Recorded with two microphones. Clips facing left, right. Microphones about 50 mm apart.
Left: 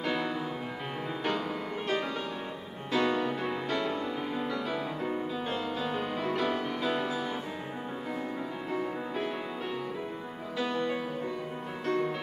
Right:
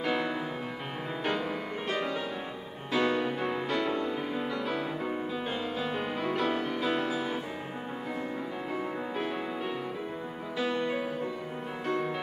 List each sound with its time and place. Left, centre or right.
0.0 s music: centre
2.9 s music: centre
10.6 s music: centre